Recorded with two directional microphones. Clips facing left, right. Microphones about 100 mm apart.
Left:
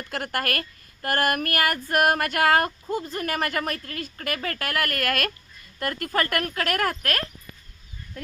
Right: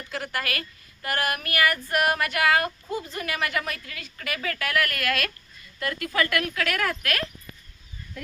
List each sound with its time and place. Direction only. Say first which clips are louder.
0.1 s speech: left 3 dB; 55° left (ahead or behind)